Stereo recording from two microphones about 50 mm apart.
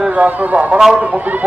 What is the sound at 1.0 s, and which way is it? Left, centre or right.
Speech, right.